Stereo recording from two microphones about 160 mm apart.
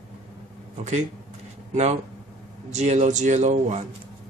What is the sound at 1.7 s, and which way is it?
Speech, 45° right (ahead or behind).